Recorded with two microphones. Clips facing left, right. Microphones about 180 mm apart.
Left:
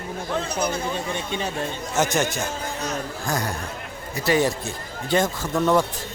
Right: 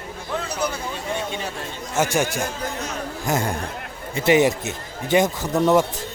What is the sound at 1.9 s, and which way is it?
Speech, 10° right (ahead or behind).